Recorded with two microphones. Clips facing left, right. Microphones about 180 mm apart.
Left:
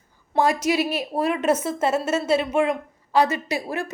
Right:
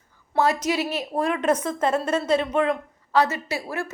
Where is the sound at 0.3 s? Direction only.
10° left (ahead or behind).